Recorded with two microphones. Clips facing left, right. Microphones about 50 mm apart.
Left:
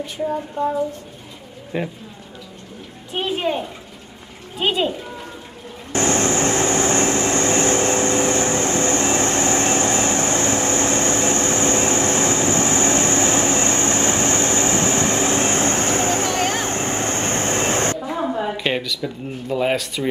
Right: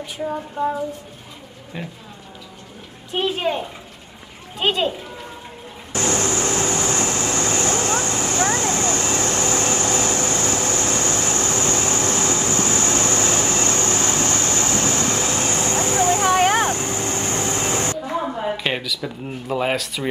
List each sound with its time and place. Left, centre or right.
0.0 s a sound: centre
1.7 s speech: centre
3.2 s speech: centre
5.9 s vehicle: left
16.2 s a sound: right
16.7 s vehicle: left
18.6 s speech: centre